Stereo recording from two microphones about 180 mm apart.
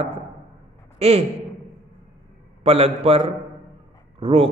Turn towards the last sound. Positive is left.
turn(degrees=-30)  # may be behind; listen again after turning